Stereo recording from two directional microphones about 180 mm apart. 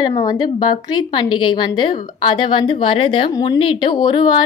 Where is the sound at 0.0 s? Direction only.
25° left (ahead or behind).